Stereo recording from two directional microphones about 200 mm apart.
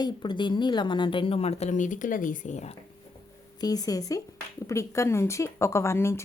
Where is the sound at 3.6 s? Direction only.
20° left (ahead or behind).